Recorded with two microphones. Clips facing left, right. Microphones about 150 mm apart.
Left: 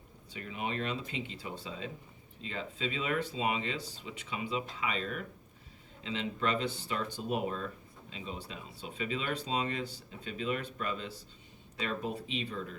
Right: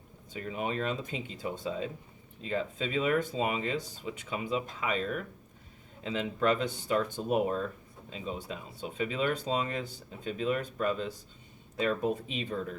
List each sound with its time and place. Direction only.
0.3 s speech: 40° right (ahead or behind)